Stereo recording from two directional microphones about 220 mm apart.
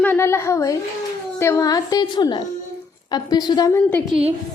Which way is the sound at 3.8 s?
5° left (ahead or behind).